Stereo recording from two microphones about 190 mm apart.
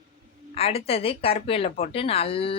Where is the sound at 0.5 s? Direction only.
30° left (ahead or behind).